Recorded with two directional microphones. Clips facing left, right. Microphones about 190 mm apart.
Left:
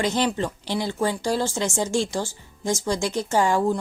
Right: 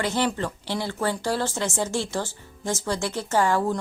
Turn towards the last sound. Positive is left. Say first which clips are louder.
# left 2 dB
turn(degrees=15)  # may be behind; listen again after turning